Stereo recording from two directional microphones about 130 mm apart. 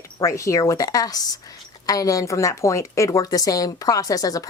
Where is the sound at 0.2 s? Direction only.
25° left (ahead or behind).